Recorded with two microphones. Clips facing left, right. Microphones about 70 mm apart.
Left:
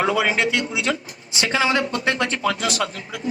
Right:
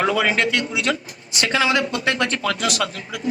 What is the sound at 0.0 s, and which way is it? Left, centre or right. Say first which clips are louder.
A man's voice: right 1 dB; centre.